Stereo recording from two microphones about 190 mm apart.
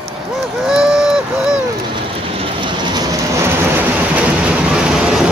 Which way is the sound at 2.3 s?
25° right (ahead or behind).